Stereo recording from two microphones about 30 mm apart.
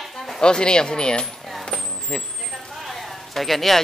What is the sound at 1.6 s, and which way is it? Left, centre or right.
Vehicle, left.